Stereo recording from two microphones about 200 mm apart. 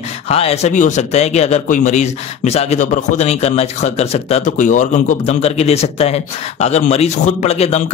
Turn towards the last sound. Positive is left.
turn(degrees=30)  # may be behind; listen again after turning